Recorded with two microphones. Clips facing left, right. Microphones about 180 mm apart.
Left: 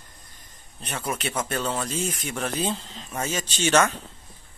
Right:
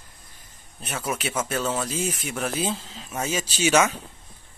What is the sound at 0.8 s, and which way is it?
Speech, 5° right (ahead or behind).